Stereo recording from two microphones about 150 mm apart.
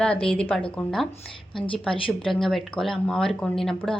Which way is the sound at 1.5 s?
35° left (ahead or behind).